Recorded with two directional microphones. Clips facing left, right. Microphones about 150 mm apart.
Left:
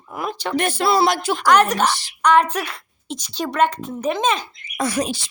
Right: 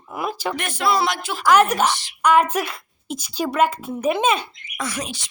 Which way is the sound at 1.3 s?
5° right (ahead or behind).